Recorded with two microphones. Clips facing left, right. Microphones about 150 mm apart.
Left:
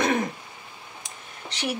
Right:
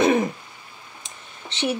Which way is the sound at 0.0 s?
20° right (ahead or behind).